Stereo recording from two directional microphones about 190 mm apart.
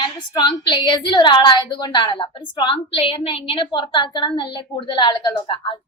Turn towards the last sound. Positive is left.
turn(degrees=25)  # may be behind; listen again after turning